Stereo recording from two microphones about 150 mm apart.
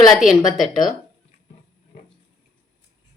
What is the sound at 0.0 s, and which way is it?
Speech, centre (ahead or behind).